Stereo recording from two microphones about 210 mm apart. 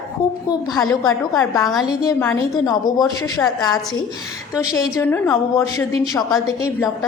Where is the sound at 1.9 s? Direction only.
15° left (ahead or behind).